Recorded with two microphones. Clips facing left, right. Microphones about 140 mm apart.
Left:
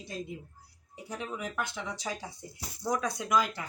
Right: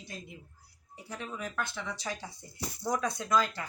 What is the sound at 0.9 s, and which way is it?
Speech, 20° left (ahead or behind).